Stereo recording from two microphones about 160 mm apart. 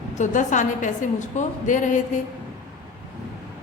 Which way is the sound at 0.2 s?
50° left (ahead or behind).